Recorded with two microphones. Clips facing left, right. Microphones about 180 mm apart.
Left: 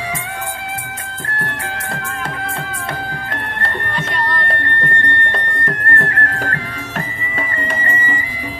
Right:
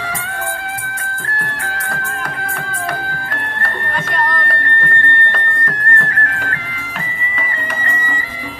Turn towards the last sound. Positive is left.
turn(degrees=30)  # may be behind; listen again after turning